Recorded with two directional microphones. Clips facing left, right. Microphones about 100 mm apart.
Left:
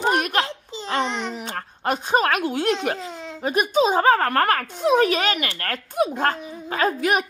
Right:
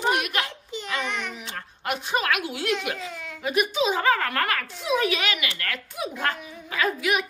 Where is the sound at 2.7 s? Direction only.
30° left (ahead or behind).